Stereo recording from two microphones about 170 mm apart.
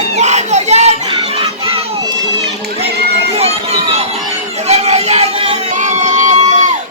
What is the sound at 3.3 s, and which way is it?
Run, 35° right (ahead or behind).